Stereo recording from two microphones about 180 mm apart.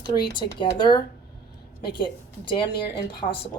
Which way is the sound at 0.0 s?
25° left (ahead or behind).